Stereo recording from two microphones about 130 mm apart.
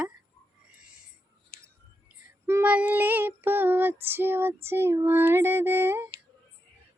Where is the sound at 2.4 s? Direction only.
15° right (ahead or behind).